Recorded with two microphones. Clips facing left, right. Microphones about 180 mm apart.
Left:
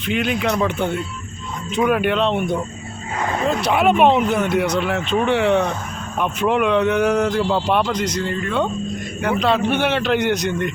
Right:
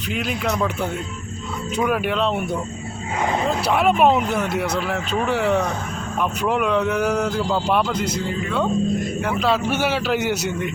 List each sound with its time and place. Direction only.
0.1 s speech: centre (ahead or behind)
3.7 s a man's voice: centre (ahead or behind)